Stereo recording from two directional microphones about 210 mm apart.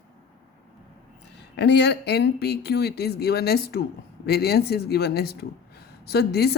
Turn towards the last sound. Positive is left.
turn(degrees=50)  # may be behind; listen again after turning